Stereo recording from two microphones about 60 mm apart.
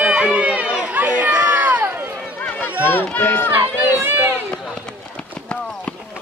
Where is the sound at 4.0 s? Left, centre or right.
Right.